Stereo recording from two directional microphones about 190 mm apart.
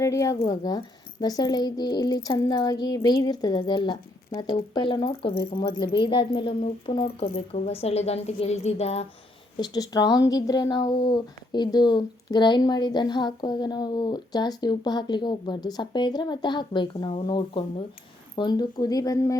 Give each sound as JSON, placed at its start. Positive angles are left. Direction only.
{"t": 0.0, "sound": "a woman's voice", "side_deg": 15}
{"t": 9.6, "sound": "speech", "side_deg": 20}